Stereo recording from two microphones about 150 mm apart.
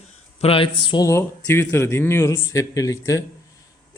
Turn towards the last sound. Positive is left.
turn(degrees=20)  # may be behind; listen again after turning